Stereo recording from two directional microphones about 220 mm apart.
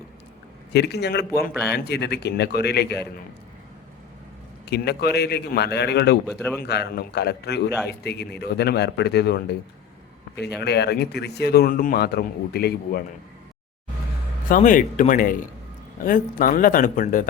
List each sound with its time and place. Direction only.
0.7 s speech: 50° left (ahead or behind)
4.7 s speech: 50° left (ahead or behind)
14.5 s speech: 35° left (ahead or behind)